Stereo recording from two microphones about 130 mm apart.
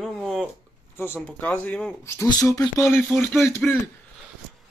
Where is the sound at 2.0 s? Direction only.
20° left (ahead or behind).